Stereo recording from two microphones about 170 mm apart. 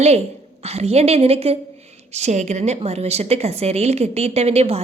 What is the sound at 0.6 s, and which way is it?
A woman's voice, 40° right (ahead or behind).